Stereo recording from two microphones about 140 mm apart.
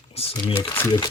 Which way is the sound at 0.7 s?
20° left (ahead or behind).